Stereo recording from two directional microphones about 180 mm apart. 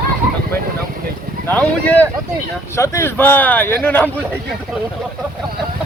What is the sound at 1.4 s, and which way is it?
Speech, 10° left (ahead or behind).